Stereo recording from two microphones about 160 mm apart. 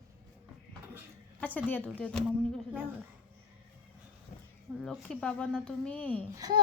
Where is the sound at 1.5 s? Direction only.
10° left (ahead or behind).